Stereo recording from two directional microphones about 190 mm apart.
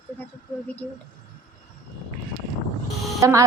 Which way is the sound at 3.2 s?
15° right (ahead or behind).